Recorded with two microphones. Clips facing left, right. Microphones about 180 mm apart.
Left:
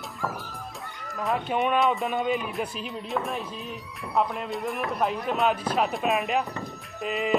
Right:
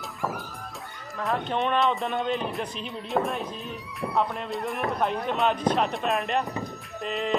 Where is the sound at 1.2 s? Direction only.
Centre (ahead or behind).